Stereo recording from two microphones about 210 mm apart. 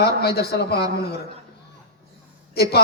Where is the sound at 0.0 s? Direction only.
50° left (ahead or behind).